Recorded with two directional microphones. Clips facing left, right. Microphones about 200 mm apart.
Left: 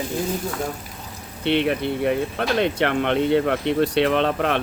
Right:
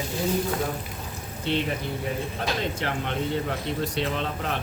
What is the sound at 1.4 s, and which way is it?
Speech, 70° left (ahead or behind).